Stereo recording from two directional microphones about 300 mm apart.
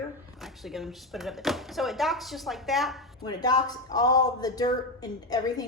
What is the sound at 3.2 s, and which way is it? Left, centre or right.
Speech, centre.